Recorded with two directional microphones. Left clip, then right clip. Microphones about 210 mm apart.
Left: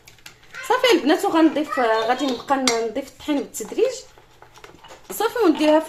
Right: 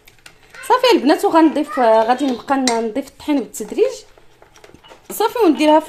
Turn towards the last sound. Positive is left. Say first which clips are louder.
# right 4 dB
turn(degrees=-40)  # may be behind; listen again after turning